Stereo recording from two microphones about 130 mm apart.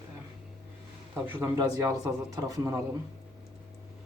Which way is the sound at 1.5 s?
30° right (ahead or behind).